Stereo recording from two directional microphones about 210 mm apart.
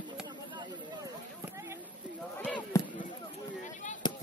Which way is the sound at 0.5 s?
20° right (ahead or behind).